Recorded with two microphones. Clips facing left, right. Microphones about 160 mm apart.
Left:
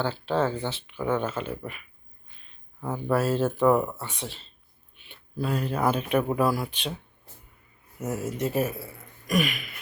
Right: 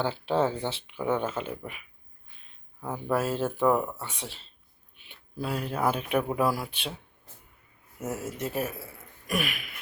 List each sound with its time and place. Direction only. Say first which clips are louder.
0.0 s speech: even; 20° right (ahead or behind)
7.9 s speech: left 3 dB; 5° right (ahead or behind)